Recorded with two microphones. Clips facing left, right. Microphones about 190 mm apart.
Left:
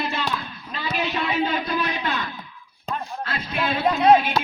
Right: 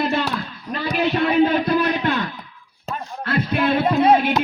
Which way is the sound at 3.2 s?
60° right (ahead or behind).